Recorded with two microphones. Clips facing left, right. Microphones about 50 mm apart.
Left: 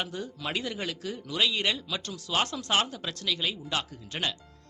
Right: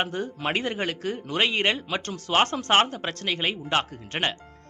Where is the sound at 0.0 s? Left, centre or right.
Right.